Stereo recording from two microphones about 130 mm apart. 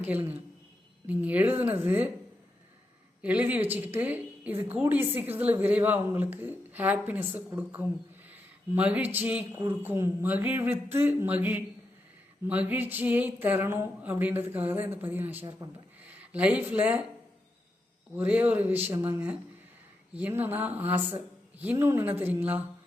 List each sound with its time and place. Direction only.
1.0 s a woman's voice: 10° right (ahead or behind)
3.2 s a woman's voice: 10° right (ahead or behind)
8.3 s a sound: 10° right (ahead or behind)
9.1 s a woman's voice: 10° right (ahead or behind)
18.2 s a woman's voice: 10° right (ahead or behind)